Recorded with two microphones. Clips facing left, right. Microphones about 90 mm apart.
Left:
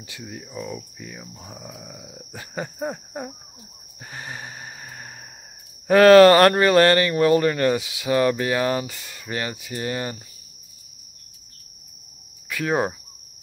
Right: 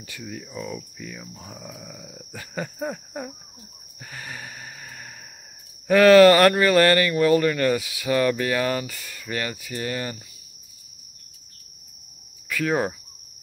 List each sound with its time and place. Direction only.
0.0 s speech: 20° left (ahead or behind)
4.0 s a sound: 25° left (ahead or behind)
5.9 s speech: 30° left (ahead or behind)
12.4 s speech: 25° left (ahead or behind)